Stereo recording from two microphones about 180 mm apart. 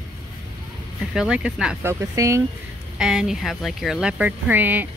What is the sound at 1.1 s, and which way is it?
Speech, 5° right (ahead or behind).